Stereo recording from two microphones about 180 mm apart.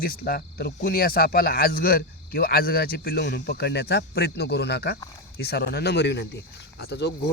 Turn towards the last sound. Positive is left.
turn(degrees=65)  # may be behind; listen again after turning